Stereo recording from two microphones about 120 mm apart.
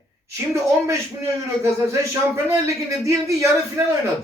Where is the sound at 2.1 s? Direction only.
20° right (ahead or behind).